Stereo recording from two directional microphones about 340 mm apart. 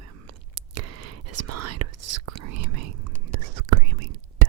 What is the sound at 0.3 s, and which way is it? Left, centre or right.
Whispering, right.